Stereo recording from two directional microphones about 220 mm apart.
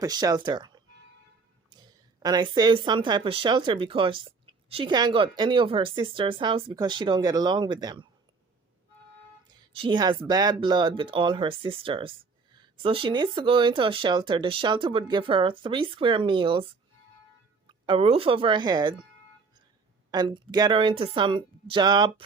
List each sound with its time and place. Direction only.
0.0 s speech: 15° right (ahead or behind)
1.8 s speech: 20° right (ahead or behind)
9.7 s speech: 20° right (ahead or behind)
17.7 s speech: 25° right (ahead or behind)
20.1 s speech: 20° right (ahead or behind)